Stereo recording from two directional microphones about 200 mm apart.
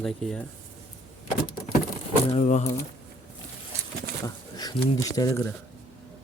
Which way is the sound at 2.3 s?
35° left (ahead or behind).